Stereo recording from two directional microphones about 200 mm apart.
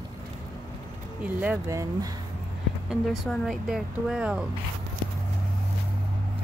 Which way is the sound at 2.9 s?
Centre (ahead or behind).